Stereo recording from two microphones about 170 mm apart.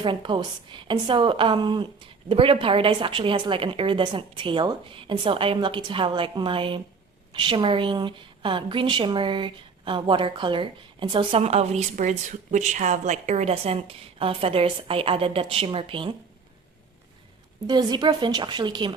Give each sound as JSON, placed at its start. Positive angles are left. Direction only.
{"t": 0.0, "sound": "a woman's voice", "side_deg": -30}
{"t": 17.7, "sound": "a woman's voice", "side_deg": -25}